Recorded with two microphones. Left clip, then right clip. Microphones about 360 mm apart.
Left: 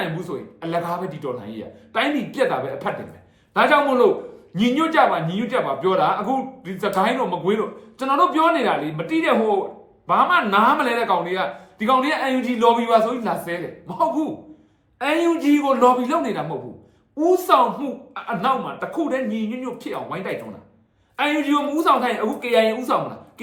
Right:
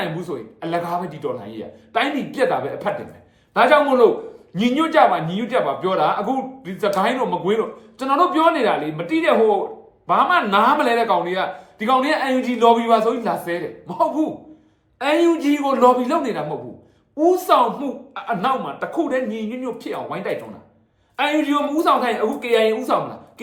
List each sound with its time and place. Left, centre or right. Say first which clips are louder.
0.0 s speech: right 1 dB; centre